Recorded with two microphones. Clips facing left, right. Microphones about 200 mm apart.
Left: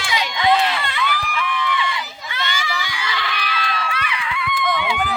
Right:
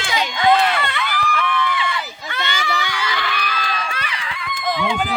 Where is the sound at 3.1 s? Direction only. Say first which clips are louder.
Right 2 dB; 45° right (ahead or behind).